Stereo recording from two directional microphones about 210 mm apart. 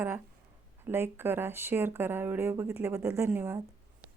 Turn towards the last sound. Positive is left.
turn(degrees=-10)  # may be behind; listen again after turning